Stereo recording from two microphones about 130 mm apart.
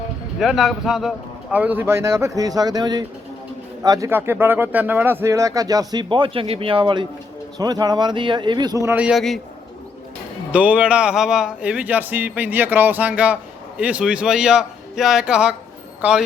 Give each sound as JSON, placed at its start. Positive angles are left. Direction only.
{"t": 0.3, "sound": "speech", "side_deg": 0}
{"t": 4.1, "sound": "speech", "side_deg": -15}
{"t": 9.0, "sound": "speech", "side_deg": -5}
{"t": 10.5, "sound": "speech", "side_deg": -10}